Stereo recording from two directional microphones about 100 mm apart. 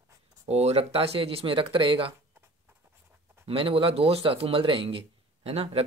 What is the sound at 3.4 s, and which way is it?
Speech, 70° right (ahead or behind).